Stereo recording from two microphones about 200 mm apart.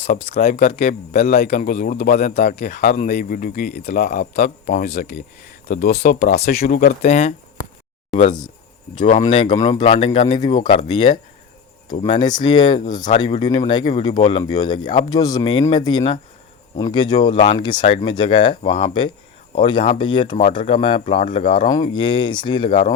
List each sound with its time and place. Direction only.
0.1 s speech: 40° left (ahead or behind)
7.0 s speech: 35° left (ahead or behind)
9.2 s speech: 25° left (ahead or behind)